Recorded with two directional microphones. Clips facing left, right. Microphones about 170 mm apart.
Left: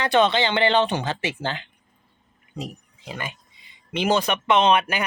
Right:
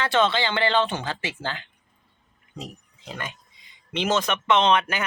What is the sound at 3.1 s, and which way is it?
A man's voice, 5° left (ahead or behind).